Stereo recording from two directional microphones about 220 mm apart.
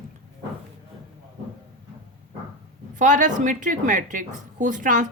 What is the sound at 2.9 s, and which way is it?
A woman's voice, 35° right (ahead or behind).